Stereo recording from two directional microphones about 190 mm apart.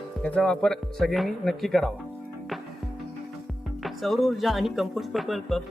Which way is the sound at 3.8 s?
Centre (ahead or behind).